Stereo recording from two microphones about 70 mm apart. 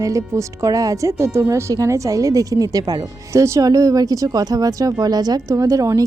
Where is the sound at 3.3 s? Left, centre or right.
Right.